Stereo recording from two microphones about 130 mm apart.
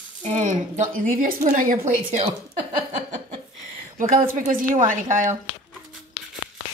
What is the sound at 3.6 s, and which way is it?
A woman's voice, 85° right.